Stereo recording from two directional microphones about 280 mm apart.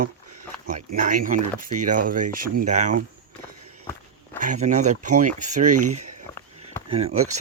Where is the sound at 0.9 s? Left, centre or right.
Right.